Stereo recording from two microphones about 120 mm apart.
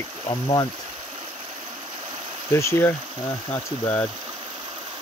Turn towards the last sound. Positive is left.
turn(degrees=15)  # may be behind; listen again after turning